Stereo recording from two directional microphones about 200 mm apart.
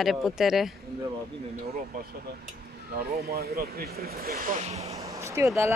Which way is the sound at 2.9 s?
50° right (ahead or behind).